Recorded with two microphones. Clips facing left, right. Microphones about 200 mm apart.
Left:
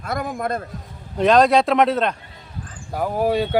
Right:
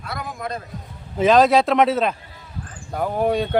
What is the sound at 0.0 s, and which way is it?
Speech, 50° left (ahead or behind).